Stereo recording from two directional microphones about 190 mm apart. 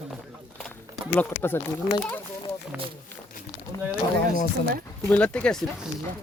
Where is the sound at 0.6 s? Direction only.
5° left (ahead or behind).